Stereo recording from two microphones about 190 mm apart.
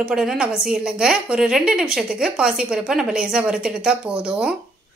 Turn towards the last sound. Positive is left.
turn(degrees=-5)  # may be behind; listen again after turning